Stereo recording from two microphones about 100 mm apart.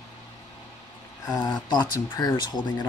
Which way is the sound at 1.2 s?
40° left (ahead or behind).